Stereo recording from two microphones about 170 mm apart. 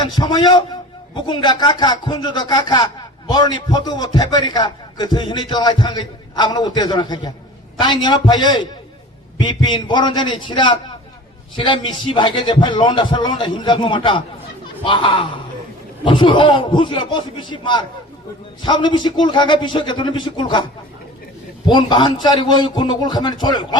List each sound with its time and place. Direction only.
0.0 s a man's voice: 25° left (ahead or behind)
21.7 s a man's voice: 30° left (ahead or behind)